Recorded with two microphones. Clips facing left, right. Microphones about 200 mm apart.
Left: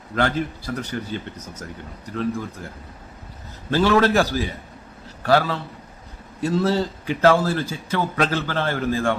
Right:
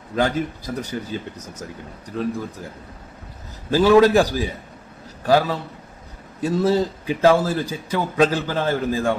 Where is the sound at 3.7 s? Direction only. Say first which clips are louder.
Right 4 dB; 10° right (ahead or behind).